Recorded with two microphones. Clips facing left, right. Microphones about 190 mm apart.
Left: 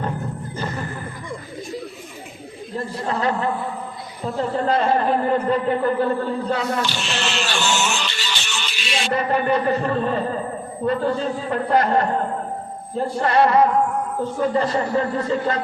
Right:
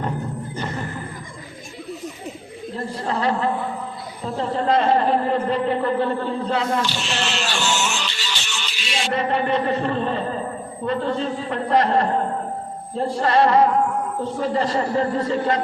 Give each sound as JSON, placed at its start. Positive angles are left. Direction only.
{"t": 3.1, "sound": "a man's voice", "side_deg": -30}
{"t": 4.5, "sound": "speech", "side_deg": -30}
{"t": 6.8, "sound": "music", "side_deg": 55}
{"t": 9.1, "sound": "speech", "side_deg": -25}